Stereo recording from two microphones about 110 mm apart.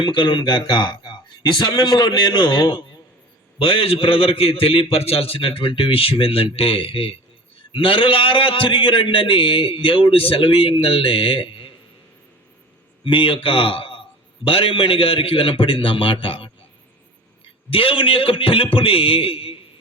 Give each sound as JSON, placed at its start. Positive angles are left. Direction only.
{"t": 0.0, "sound": "a man's voice", "side_deg": 45}
{"t": 13.1, "sound": "a man's voice", "side_deg": 55}
{"t": 17.7, "sound": "a man's voice", "side_deg": 55}